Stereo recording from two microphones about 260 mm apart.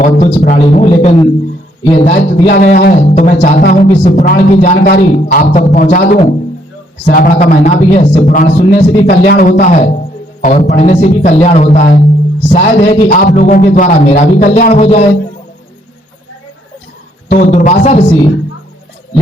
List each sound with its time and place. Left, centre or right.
0.0 s a man's voice: left
2.5 s a man's voice: left
17.2 s a man's voice: left